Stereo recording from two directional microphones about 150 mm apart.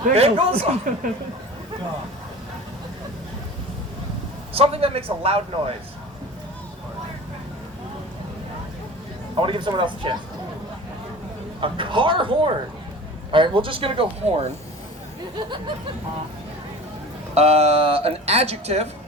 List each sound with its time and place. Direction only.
0.1 s a man's voice: 40° right (ahead or behind)
4.5 s a man's voice: 40° right (ahead or behind)
9.3 s a man's voice: 35° right (ahead or behind)
11.6 s a man's voice: 35° right (ahead or behind)
17.3 s speech: 45° right (ahead or behind)